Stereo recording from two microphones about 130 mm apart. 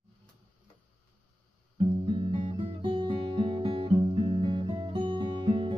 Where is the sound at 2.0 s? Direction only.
40° right (ahead or behind).